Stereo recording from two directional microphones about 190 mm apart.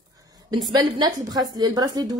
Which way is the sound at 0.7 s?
20° right (ahead or behind).